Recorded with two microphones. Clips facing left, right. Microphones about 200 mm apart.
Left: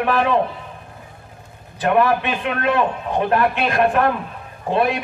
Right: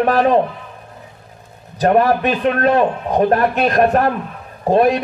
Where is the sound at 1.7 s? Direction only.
40° right (ahead or behind).